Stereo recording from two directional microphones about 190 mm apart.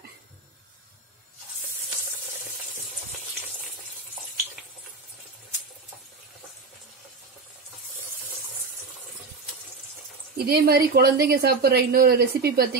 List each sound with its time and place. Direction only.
10.3 s speech: 55° right (ahead or behind)